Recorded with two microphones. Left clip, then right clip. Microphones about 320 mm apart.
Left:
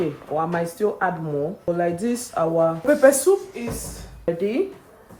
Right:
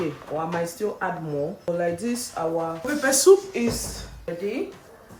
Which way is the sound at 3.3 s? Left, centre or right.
Centre.